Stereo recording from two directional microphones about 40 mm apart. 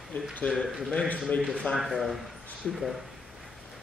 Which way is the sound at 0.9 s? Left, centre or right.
Left.